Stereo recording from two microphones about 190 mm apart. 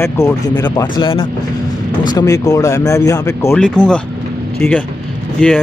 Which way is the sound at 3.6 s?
5° left (ahead or behind).